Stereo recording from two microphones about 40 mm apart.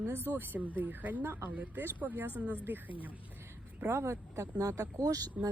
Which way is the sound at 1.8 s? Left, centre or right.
Right.